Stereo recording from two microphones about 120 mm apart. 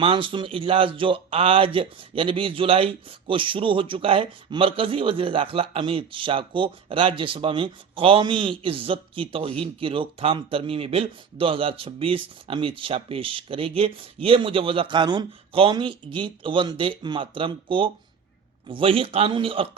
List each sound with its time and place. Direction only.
0.0 s speech: 45° right (ahead or behind)